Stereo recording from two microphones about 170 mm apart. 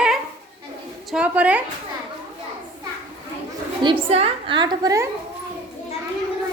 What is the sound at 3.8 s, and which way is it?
A woman's voice, 35° right (ahead or behind).